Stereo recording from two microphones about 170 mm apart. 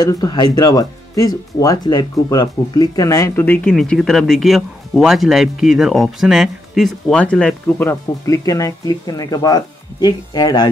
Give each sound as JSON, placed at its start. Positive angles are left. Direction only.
{"t": 0.0, "sound": "speech", "side_deg": 25}